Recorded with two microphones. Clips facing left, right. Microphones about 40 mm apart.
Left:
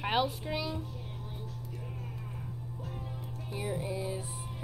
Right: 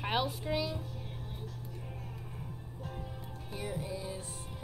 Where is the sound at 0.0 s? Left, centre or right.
Centre.